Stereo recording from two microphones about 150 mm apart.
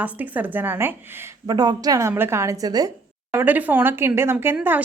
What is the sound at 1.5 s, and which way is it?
A woman's voice, 25° right (ahead or behind).